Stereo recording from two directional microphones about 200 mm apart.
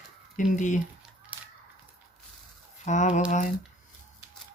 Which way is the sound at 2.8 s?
35° left (ahead or behind).